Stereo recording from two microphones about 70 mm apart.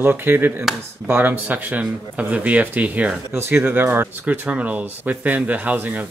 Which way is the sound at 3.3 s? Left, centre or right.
Right.